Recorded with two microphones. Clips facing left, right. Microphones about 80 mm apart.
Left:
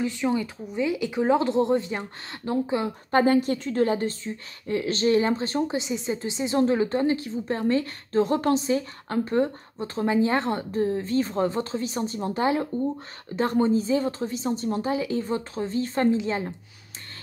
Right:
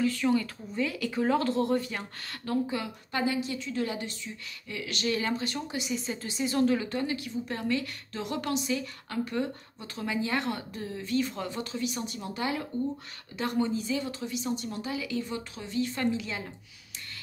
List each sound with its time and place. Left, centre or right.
0.0 s speech: left
3.1 s a woman's voice: left